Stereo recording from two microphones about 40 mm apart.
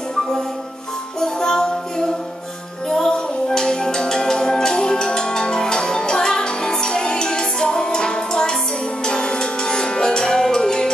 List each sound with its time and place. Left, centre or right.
1.2 s music: centre